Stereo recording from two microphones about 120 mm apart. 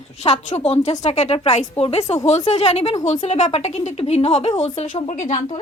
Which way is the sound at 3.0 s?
75° left (ahead or behind).